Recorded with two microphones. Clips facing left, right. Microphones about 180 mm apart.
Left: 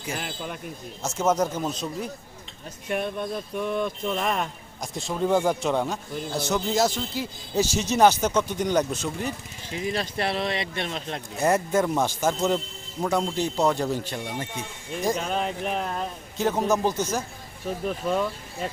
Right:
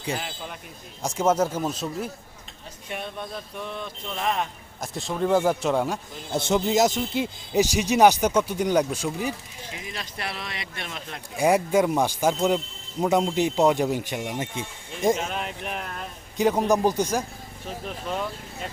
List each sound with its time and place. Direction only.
1.0 s speech: 10° right (ahead or behind)
2.9 s speech: 55° left (ahead or behind)
4.8 s a man's voice: centre (ahead or behind)
6.3 s speech: 20° right (ahead or behind)
9.7 s speech: 35° left (ahead or behind)
11.3 s speech: 10° right (ahead or behind)
15.3 s speech: 35° left (ahead or behind)
16.4 s speech: 15° right (ahead or behind)